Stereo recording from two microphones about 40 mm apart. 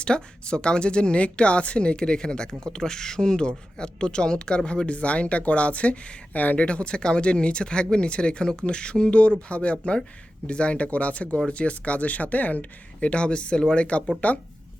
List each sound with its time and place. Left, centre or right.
0.0 s speech: left
6.3 s speech: left
6.6 s speech: left
14.2 s speech: left